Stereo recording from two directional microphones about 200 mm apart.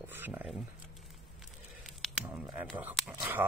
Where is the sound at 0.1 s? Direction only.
10° right (ahead or behind).